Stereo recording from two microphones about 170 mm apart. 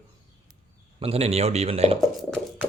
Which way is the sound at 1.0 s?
35° right (ahead or behind).